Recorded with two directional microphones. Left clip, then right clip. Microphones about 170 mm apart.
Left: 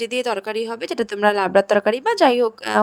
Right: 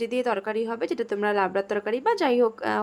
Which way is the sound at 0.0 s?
40° left (ahead or behind).